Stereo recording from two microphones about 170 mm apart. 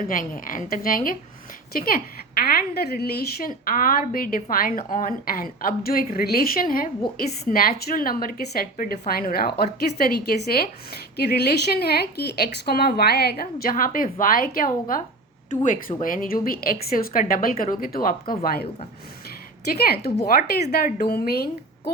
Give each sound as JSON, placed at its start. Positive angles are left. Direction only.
{"t": 0.1, "sound": "a woman's voice", "side_deg": 55}
{"t": 11.7, "sound": "a woman's voice", "side_deg": 70}
{"t": 19.7, "sound": "a woman's voice", "side_deg": 65}